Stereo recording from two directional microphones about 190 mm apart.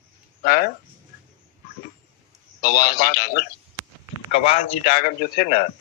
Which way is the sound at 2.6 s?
55° left (ahead or behind).